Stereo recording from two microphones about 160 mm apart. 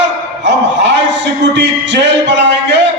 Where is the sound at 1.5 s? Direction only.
90° right.